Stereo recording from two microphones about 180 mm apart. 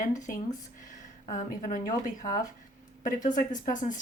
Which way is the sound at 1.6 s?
45° left (ahead or behind).